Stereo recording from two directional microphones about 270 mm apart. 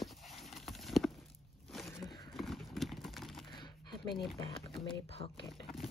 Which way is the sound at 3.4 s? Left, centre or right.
Centre.